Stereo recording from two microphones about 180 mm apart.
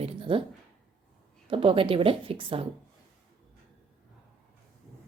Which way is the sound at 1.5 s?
30° right (ahead or behind).